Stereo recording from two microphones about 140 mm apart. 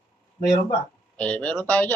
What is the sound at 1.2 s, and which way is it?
Speech, 10° left (ahead or behind).